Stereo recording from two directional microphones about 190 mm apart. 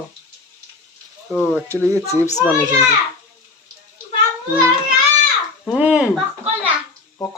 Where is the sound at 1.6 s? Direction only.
15° right (ahead or behind).